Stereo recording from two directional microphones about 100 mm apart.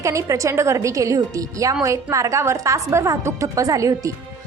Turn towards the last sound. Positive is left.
turn(degrees=-35)  # may be behind; listen again after turning